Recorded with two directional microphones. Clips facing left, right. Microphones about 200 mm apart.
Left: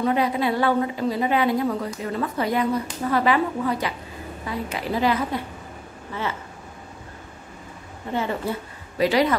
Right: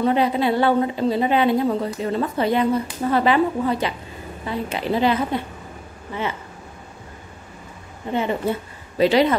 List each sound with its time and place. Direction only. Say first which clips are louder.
0.0 s a woman's voice: right 3 dB; 25° right (ahead or behind)
8.1 s a woman's voice: right 4 dB; 20° right (ahead or behind)